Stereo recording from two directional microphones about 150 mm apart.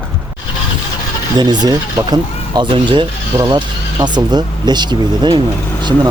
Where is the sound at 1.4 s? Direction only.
25° right (ahead or behind).